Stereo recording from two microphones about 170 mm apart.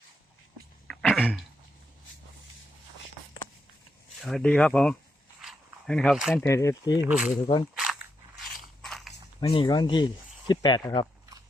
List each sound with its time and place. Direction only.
0.9 s a sound: centre (ahead or behind)
4.2 s speech: centre (ahead or behind)
5.4 s dog: centre (ahead or behind)
6.3 s speech: 15° left (ahead or behind)
7.1 s speech: 5° right (ahead or behind)
7.8 s a sound: 5° right (ahead or behind)
8.8 s mechanisms: centre (ahead or behind)
9.4 s speech: 30° left (ahead or behind)